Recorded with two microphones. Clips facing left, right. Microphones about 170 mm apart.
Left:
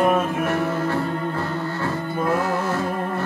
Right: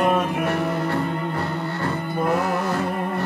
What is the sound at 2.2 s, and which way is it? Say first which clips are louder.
Music: even; 15° right (ahead or behind).